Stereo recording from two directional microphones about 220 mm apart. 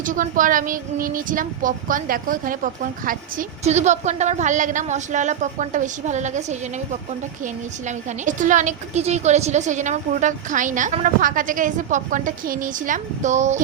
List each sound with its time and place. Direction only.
0.0 s a woman's voice: 35° right (ahead or behind)
7.9 s a woman's voice: 35° right (ahead or behind)